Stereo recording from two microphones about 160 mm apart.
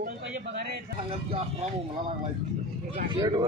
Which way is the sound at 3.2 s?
25° right (ahead or behind).